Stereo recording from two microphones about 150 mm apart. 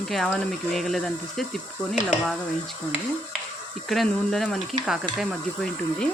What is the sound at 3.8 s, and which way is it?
Speech, centre (ahead or behind).